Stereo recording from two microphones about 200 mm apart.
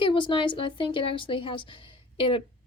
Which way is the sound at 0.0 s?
25° left (ahead or behind).